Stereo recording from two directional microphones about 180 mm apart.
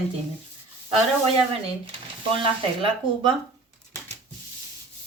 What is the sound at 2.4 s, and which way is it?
Speech, 30° right (ahead or behind).